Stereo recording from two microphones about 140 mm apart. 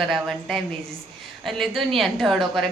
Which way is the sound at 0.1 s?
Centre (ahead or behind).